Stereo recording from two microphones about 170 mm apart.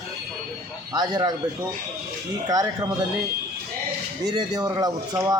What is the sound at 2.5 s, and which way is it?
Speech, 20° right (ahead or behind).